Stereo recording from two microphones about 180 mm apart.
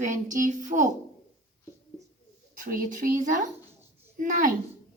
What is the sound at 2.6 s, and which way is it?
Music, 50° right (ahead or behind).